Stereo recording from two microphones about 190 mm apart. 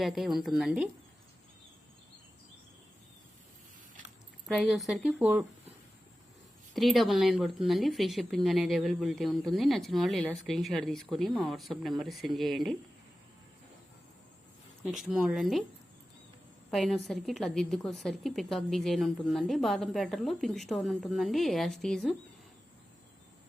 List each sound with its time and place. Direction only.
0.0 s a woman's voice: centre (ahead or behind)
4.4 s a woman's voice: centre (ahead or behind)
6.7 s a woman's voice: centre (ahead or behind)
14.8 s a woman's voice: 5° right (ahead or behind)
16.7 s a woman's voice: centre (ahead or behind)